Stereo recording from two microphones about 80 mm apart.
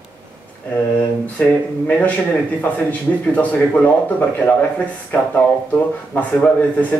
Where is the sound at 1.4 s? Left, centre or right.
Centre.